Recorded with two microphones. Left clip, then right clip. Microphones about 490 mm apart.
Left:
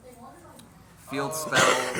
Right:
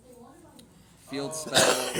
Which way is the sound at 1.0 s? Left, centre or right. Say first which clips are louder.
Left 4 dB; right.